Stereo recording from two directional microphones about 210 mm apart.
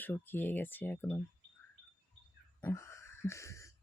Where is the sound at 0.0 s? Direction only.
10° left (ahead or behind).